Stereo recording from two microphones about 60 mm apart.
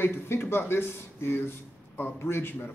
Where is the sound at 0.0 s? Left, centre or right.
Left.